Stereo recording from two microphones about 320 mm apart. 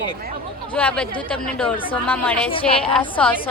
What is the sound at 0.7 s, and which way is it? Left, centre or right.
A woman's voice, centre.